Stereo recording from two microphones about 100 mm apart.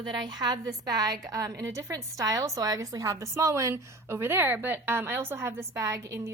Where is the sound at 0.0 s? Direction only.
45° right (ahead or behind).